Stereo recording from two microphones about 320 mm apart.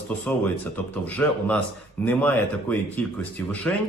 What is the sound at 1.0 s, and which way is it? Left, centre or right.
A man's voice, centre.